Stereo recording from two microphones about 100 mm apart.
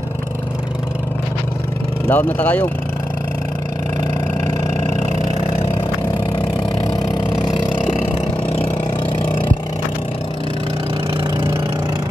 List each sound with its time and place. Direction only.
2.0 s speech: 20° left (ahead or behind)